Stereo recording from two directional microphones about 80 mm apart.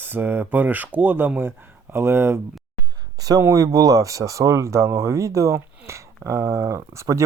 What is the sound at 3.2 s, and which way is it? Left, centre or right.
Speech, right.